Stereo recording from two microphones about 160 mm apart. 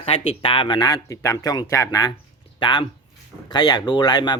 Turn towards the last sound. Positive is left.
turn(degrees=25)  # may be behind; listen again after turning